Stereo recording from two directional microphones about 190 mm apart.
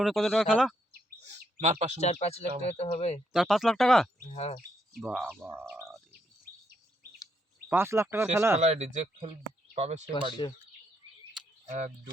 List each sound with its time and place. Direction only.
0.0 s speech: centre (ahead or behind)
1.2 s bird: 35° right (ahead or behind)
2.0 s speech: 35° left (ahead or behind)
3.3 s speech: centre (ahead or behind)
4.3 s speech: 35° left (ahead or behind)
4.9 s speech: centre (ahead or behind)
5.4 s bird: 10° right (ahead or behind)
7.7 s speech: 15° right (ahead or behind)
8.5 s speech: 35° right (ahead or behind)
11.6 s speech: 40° right (ahead or behind)